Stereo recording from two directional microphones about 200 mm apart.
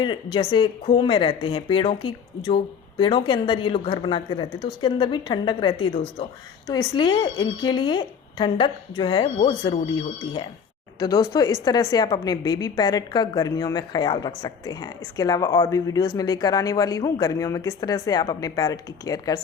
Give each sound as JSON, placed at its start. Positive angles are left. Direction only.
{"t": 0.0, "sound": "speech", "side_deg": 25}
{"t": 11.0, "sound": "a woman's voice", "side_deg": 15}